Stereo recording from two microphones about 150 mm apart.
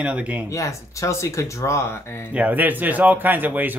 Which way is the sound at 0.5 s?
20° left (ahead or behind).